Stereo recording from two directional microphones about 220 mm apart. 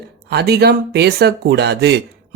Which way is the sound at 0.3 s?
45° right (ahead or behind).